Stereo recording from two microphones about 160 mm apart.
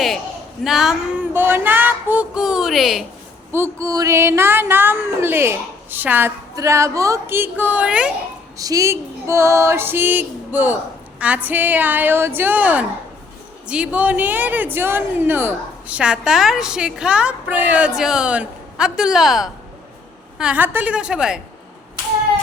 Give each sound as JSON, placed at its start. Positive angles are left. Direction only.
{"t": 0.6, "sound": "a sound", "side_deg": 0}
{"t": 3.5, "sound": "a woman's voice", "side_deg": -15}
{"t": 8.5, "sound": "a woman's voice", "side_deg": -20}